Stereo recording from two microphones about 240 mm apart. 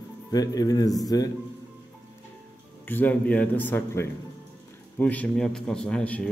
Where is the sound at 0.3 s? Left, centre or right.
Centre.